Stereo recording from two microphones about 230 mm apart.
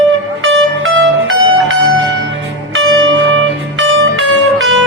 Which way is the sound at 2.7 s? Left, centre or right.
Right.